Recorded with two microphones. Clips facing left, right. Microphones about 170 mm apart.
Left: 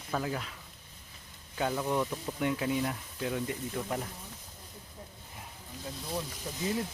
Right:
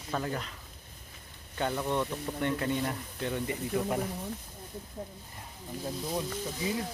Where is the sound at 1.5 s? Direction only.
5° left (ahead or behind).